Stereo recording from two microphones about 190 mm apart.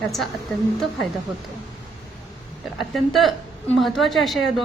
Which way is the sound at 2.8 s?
Centre (ahead or behind).